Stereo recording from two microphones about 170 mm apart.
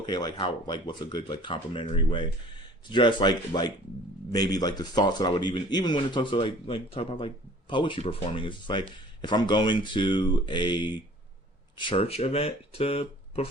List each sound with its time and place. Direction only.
0.0 s speech: 25° left (ahead or behind)